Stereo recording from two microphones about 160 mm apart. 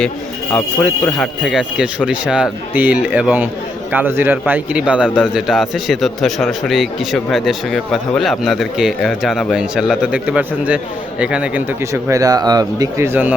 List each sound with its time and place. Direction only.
0.5 s a man's voice: 10° left (ahead or behind); by 11.6 s 5° right (ahead or behind)
11.8 s a man's voice: 20° right (ahead or behind)